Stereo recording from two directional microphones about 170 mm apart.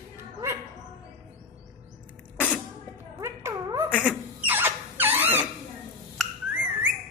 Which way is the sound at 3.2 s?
15° right (ahead or behind).